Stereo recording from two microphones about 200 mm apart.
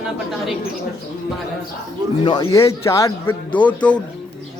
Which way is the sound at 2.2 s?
20° left (ahead or behind).